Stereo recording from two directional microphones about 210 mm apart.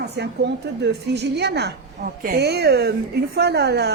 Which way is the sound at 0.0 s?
55° right (ahead or behind).